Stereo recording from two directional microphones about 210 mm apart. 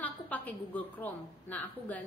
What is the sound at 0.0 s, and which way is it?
A woman's voice, 5° left (ahead or behind).